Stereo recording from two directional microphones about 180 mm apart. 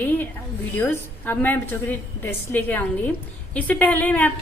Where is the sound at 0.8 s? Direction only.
10° left (ahead or behind).